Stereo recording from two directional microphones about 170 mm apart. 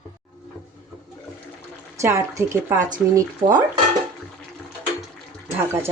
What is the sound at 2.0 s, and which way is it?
Speech, 15° right (ahead or behind).